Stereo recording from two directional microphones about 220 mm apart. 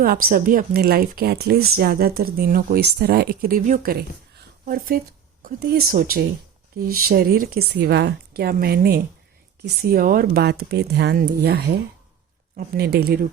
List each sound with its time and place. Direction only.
0.3 s speech: 40° right (ahead or behind)